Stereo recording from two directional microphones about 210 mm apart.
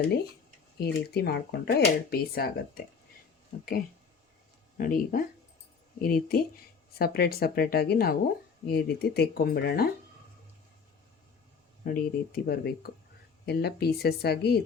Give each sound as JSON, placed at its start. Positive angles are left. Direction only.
{"t": 0.8, "sound": "speech", "side_deg": 50}
{"t": 4.8, "sound": "speech", "side_deg": 40}
{"t": 11.8, "sound": "speech", "side_deg": 45}